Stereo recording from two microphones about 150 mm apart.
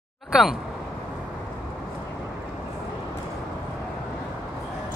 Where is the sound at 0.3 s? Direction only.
5° right (ahead or behind).